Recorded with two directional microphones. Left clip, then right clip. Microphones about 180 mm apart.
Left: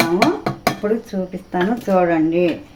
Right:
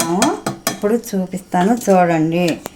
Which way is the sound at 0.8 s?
60° right (ahead or behind).